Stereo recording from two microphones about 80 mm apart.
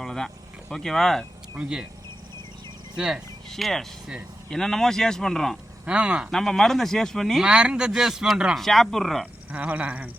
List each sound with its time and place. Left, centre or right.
0.0 s a sound: centre
0.7 s speech: centre
1.5 s speech: centre
2.9 s speech: centre
3.5 s speech: centre
5.8 s speech: centre
6.3 s speech: centre
7.4 s speech: centre
8.5 s speech: centre
9.5 s dog: right